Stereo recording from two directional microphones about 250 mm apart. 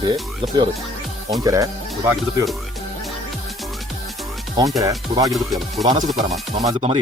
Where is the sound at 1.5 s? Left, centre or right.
Centre.